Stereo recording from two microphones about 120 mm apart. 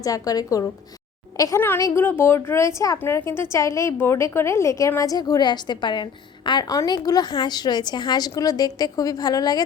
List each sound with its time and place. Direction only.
0.0 s a woman's voice: 30° left (ahead or behind)